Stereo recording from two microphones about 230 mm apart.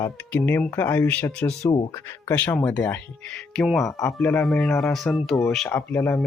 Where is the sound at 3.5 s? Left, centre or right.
Centre.